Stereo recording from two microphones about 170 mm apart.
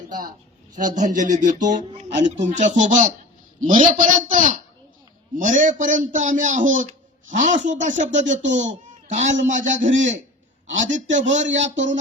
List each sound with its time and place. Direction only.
0.8 s a man's voice: 50° right (ahead or behind)
11.4 s speech: 90° right
11.7 s a man's voice: 45° right (ahead or behind)